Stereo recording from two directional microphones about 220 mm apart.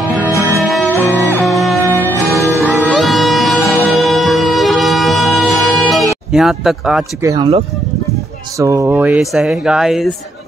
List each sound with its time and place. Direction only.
0.6 s music: centre (ahead or behind)
6.3 s speech: centre (ahead or behind)
7.2 s speech: 20° right (ahead or behind); by 10.1 s centre (ahead or behind)